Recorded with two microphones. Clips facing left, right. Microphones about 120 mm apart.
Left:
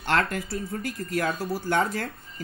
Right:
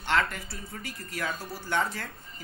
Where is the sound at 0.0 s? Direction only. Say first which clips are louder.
Left 3 dB; 45° left (ahead or behind).